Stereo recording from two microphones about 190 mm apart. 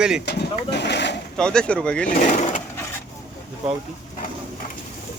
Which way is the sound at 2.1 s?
40° left (ahead or behind).